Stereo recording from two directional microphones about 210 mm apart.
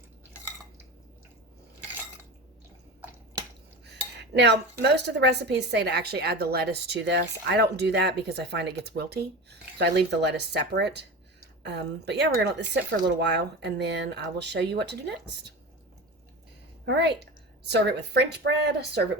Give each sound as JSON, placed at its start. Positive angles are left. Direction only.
{"t": 3.8, "sound": "speech", "side_deg": -55}
{"t": 16.8, "sound": "speech", "side_deg": -55}